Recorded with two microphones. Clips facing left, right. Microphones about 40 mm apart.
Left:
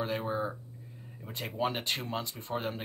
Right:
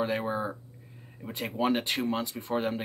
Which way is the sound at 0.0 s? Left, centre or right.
Centre.